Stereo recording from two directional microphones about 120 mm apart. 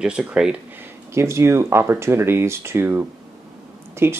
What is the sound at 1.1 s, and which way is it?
Speech, 25° right (ahead or behind).